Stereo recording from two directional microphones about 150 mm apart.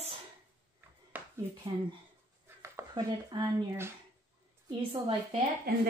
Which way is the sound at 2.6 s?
20° right (ahead or behind).